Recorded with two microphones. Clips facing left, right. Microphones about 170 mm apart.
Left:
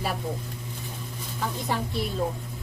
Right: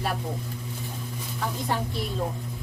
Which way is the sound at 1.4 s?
Centre (ahead or behind).